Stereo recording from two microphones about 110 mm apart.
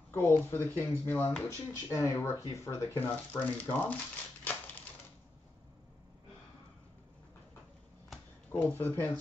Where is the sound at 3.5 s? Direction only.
15° left (ahead or behind).